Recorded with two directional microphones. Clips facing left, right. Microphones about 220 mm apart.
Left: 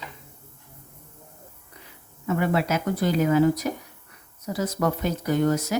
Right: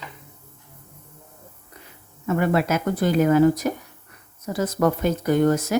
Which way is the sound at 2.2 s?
50° right (ahead or behind).